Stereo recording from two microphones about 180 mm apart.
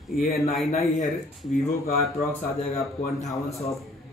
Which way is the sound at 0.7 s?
40° left (ahead or behind).